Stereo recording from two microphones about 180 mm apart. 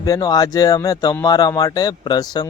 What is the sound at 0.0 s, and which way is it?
Speech, 20° left (ahead or behind).